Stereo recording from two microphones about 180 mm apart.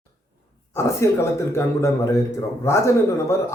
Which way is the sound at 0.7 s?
15° left (ahead or behind).